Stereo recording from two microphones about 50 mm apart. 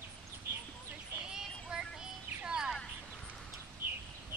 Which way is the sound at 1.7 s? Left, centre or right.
Centre.